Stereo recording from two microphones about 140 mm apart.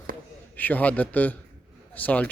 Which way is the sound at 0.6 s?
10° left (ahead or behind).